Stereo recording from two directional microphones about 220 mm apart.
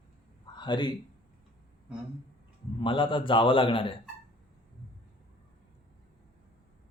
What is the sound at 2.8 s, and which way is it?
A man's voice, 20° left (ahead or behind).